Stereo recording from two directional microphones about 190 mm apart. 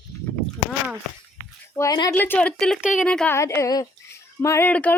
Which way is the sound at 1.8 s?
20° left (ahead or behind).